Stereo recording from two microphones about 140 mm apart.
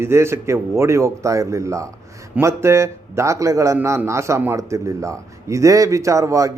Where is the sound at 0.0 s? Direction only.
20° right (ahead or behind).